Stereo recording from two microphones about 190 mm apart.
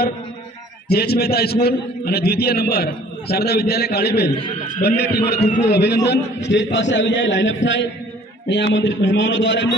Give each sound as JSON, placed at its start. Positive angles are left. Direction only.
{"t": 0.8, "sound": "a man's voice", "side_deg": 55}